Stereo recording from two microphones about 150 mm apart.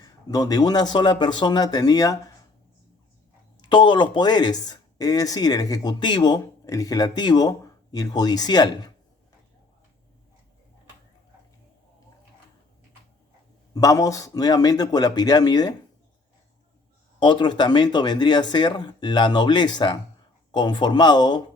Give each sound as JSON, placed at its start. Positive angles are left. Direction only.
{"t": 0.0, "sound": "speech", "side_deg": 25}
{"t": 3.7, "sound": "speech", "side_deg": 30}
{"t": 13.7, "sound": "speech", "side_deg": 25}
{"t": 17.2, "sound": "speech", "side_deg": 30}